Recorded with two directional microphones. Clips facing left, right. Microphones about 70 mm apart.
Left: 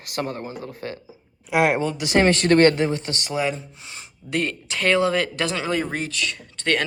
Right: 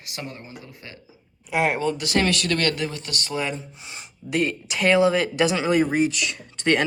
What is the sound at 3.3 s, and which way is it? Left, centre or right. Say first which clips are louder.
Speech: left 3 dB; centre.